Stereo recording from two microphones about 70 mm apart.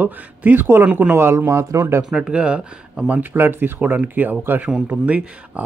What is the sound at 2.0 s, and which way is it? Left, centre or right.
Speech, centre.